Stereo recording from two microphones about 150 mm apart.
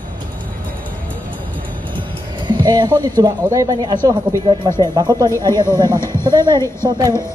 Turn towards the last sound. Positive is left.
turn(degrees=-30)  # may be behind; listen again after turning